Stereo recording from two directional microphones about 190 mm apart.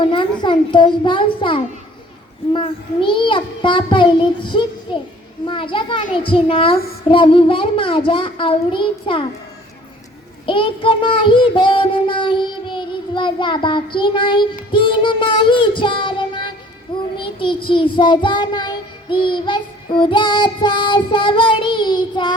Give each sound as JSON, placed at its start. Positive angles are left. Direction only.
{"t": 0.0, "sound": "child singing", "side_deg": 25}
{"t": 10.4, "sound": "child singing", "side_deg": 25}